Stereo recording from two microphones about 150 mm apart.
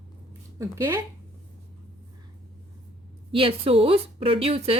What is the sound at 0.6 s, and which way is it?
Speech, 15° right (ahead or behind).